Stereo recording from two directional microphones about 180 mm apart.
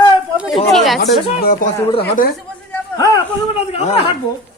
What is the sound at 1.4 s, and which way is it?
Speech, 55° left (ahead or behind).